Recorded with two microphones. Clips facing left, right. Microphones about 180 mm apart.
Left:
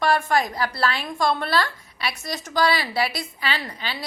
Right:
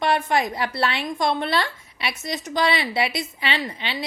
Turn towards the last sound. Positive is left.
turn(degrees=-25)  # may be behind; listen again after turning